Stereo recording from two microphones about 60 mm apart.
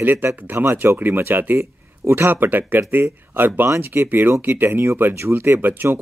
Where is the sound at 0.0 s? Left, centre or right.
Right.